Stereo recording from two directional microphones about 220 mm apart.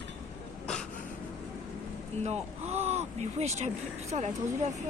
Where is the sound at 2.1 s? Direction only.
30° right (ahead or behind).